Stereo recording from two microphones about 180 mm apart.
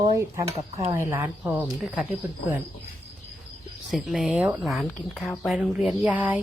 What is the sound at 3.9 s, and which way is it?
Speech, centre (ahead or behind).